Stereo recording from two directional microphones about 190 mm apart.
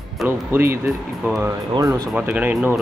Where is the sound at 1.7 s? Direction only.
20° right (ahead or behind).